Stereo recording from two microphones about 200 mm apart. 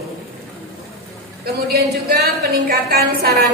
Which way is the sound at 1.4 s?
50° right (ahead or behind).